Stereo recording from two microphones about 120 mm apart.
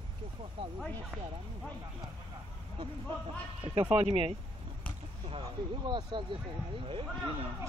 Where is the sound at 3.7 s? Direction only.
50° right (ahead or behind).